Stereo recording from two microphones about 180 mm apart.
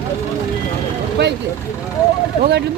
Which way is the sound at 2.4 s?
65° right (ahead or behind).